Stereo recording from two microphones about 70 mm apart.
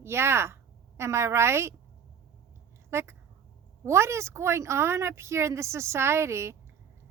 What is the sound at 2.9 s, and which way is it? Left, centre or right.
Speech, right.